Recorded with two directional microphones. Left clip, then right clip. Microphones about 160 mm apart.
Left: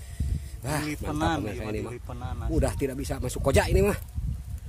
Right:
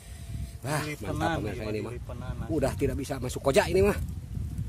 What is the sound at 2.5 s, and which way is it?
A man's voice, centre (ahead or behind).